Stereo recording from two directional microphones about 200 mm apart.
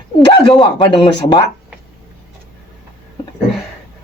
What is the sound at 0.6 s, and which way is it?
Speech, 20° left (ahead or behind).